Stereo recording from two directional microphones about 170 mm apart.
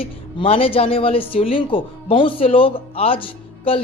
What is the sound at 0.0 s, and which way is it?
Speech, 35° left (ahead or behind).